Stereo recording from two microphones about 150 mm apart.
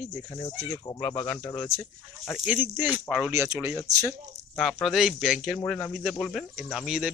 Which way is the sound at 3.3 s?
20° right (ahead or behind).